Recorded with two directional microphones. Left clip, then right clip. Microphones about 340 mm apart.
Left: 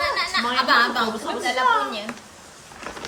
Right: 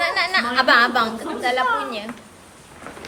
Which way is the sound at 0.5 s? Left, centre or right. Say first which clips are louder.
Right 3 dB; centre.